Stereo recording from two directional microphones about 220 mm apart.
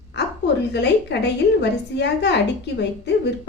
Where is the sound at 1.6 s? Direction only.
50° left (ahead or behind).